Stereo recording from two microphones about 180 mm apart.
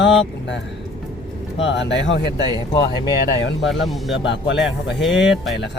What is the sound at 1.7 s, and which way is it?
Speech, 80° left.